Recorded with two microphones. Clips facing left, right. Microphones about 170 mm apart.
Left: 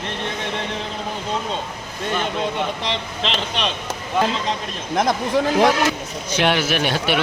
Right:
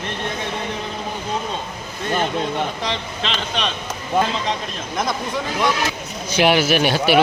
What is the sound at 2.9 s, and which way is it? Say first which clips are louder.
Speech: left 1 dB; centre (ahead or behind).